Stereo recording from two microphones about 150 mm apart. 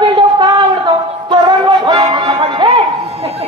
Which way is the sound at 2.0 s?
35° right (ahead or behind).